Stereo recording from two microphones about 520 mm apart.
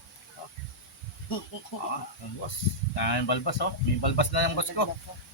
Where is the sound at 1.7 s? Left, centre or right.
Left.